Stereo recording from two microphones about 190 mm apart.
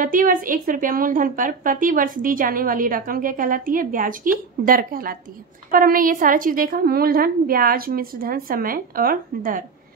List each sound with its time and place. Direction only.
0.0 s a woman's voice: 45° right (ahead or behind)